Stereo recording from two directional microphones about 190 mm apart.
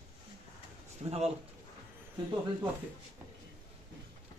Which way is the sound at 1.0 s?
35° right (ahead or behind).